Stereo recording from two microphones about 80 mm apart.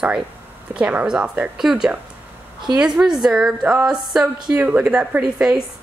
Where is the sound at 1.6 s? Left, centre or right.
Centre.